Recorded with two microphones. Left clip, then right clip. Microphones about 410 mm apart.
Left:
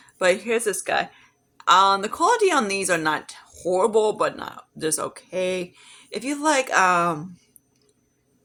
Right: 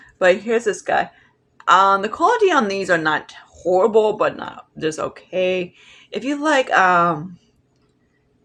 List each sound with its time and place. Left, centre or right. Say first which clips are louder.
0.2 s a woman's voice: right 5 dB; left